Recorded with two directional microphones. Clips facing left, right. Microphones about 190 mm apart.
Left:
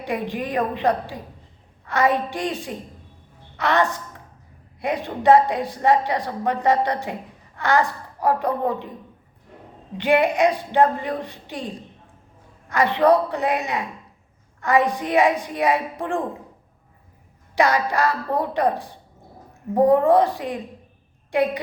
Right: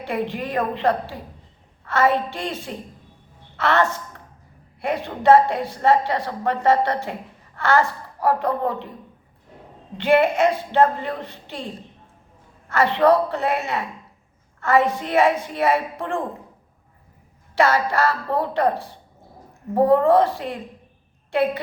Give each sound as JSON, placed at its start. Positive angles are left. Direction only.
{"t": 0.0, "sound": "a woman's voice", "side_deg": 15}
{"t": 10.0, "sound": "a woman's voice", "side_deg": 15}
{"t": 12.6, "sound": "a woman's voice", "side_deg": 15}
{"t": 17.5, "sound": "a woman's voice", "side_deg": 15}